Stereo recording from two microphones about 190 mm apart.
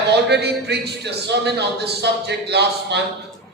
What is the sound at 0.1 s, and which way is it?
A man's voice, 60° right (ahead or behind).